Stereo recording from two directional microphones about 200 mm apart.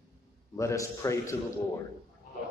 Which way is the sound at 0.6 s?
15° left (ahead or behind).